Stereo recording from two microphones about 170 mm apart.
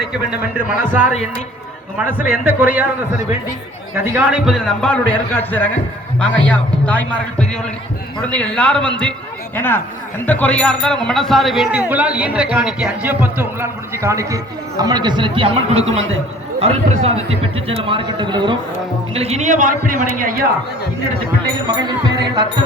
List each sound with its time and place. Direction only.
2.0 s a man's voice: 10° right (ahead or behind)
4.0 s a man's voice: 10° right (ahead or behind); by 18.5 s 25° right (ahead or behind)
19.1 s a man's voice: 35° right (ahead or behind)
21.7 s a man's voice: 25° right (ahead or behind)